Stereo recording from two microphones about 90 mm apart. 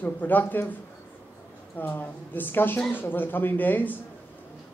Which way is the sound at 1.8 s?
20° left (ahead or behind).